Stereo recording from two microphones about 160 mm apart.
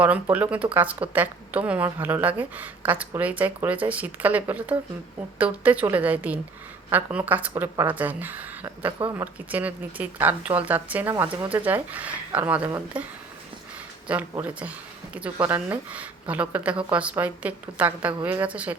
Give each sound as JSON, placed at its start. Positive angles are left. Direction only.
{"t": 0.0, "sound": "speech", "side_deg": -10}
{"t": 11.3, "sound": "speech", "side_deg": -35}
{"t": 11.5, "sound": "speech", "side_deg": -10}